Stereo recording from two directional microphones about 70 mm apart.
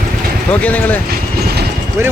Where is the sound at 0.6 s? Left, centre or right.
Left.